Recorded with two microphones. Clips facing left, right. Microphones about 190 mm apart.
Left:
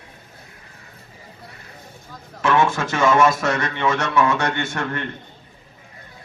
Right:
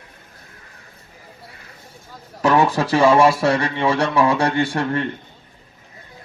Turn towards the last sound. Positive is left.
turn(degrees=-30)  # may be behind; listen again after turning